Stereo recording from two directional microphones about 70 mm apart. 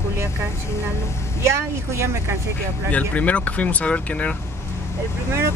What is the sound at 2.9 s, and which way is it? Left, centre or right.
Speech, left.